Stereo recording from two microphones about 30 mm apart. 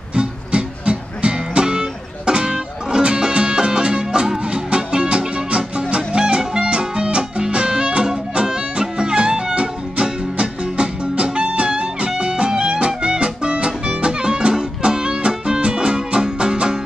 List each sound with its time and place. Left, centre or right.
0.1 s music: right